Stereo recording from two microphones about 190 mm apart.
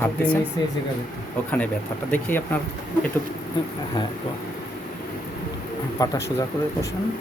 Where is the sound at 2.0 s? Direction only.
10° left (ahead or behind).